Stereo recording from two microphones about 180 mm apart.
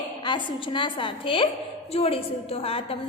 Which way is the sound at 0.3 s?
25° left (ahead or behind).